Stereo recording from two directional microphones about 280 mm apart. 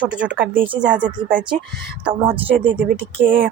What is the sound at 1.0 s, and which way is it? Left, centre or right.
Speech, centre.